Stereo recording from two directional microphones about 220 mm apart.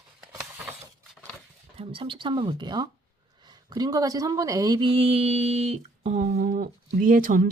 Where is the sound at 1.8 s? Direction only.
25° right (ahead or behind).